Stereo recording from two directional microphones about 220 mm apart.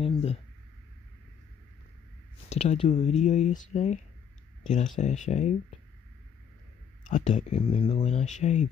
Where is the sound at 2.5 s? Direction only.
30° left (ahead or behind).